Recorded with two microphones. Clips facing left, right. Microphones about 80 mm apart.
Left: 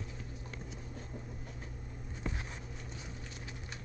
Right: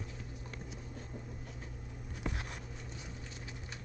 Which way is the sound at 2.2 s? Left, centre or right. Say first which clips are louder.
Right 1 dB; right.